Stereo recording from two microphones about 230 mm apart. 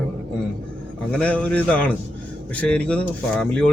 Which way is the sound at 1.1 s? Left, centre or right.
Centre.